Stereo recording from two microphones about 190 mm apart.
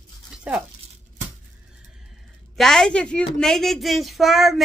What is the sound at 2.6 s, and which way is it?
A child's voice, 5° left (ahead or behind).